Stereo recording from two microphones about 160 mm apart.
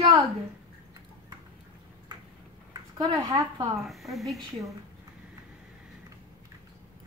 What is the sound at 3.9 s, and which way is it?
Speech, centre (ahead or behind).